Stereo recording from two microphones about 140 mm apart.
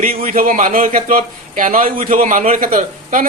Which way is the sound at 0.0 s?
75° right (ahead or behind).